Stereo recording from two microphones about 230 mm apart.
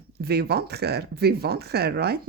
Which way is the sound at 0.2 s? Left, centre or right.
Right.